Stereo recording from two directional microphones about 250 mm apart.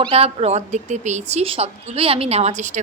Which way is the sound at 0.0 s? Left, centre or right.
Right.